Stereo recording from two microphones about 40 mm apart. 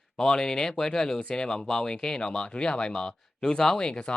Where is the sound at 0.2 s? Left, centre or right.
Centre.